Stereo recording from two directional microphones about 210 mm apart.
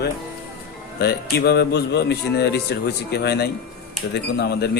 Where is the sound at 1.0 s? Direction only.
50° left (ahead or behind).